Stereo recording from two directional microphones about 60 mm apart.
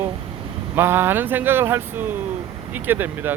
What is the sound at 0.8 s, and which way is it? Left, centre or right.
Speech, right.